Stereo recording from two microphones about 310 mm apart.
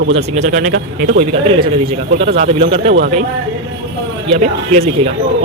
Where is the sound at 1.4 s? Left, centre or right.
Centre.